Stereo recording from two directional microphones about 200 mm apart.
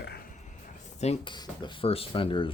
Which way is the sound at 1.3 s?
20° left (ahead or behind).